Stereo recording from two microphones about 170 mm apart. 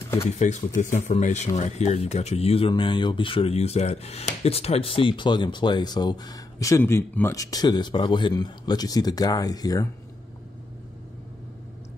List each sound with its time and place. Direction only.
0.4 s speech: 45° left (ahead or behind); by 9.8 s 20° left (ahead or behind)